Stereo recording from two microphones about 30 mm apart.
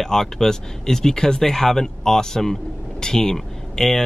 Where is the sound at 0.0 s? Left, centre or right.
Centre.